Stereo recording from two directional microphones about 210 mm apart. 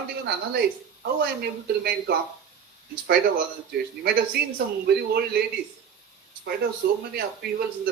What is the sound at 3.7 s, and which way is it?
A man's voice, 50° right (ahead or behind).